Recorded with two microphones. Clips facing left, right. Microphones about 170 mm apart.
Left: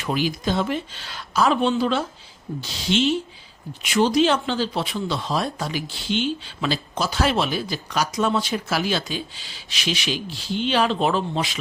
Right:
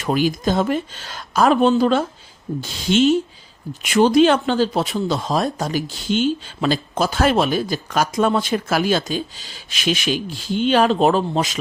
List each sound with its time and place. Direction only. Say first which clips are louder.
0.0 s speech: right 5 dB; 45° right (ahead or behind)